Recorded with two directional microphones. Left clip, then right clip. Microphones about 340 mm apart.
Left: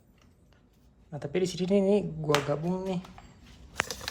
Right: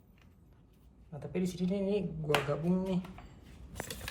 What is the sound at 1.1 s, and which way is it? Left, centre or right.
Speech, left.